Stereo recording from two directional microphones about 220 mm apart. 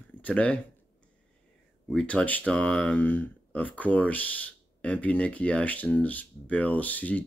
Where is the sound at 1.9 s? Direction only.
5° left (ahead or behind).